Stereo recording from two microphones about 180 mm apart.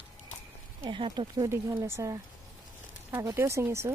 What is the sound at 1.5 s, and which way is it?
Speech, 15° right (ahead or behind).